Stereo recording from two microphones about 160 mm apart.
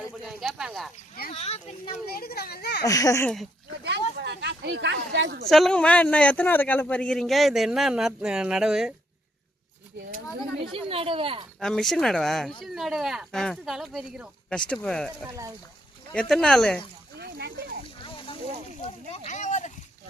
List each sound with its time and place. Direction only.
0.3 s speech: centre (ahead or behind)
1.3 s speech: 40° left (ahead or behind)
2.0 s a child's voice: 75° left (ahead or behind); by 2.8 s 90° left
2.8 s speech: 20° left (ahead or behind)
3.8 s speech: 90° right
5.5 s speech: centre (ahead or behind)
10.6 s speech: 35° right (ahead or behind)
11.6 s speech: centre (ahead or behind)
15.3 s speech: 20° right (ahead or behind)
16.3 s speech: 5° left (ahead or behind)
17.2 s a sound: 90° right
18.0 s a sound: 30° left (ahead or behind)
19.1 s a sound: 50° left (ahead or behind)